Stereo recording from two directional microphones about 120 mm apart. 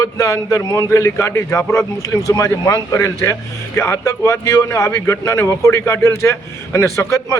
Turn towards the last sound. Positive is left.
turn(degrees=25)  # may be behind; listen again after turning